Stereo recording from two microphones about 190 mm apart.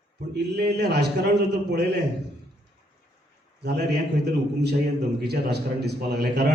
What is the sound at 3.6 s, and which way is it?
A man's voice, 60° right (ahead or behind).